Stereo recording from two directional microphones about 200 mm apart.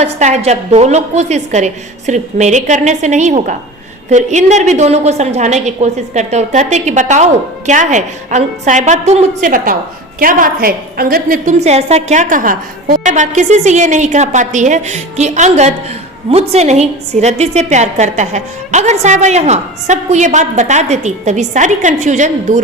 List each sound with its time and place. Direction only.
0.0 s a woman's voice: 35° right (ahead or behind)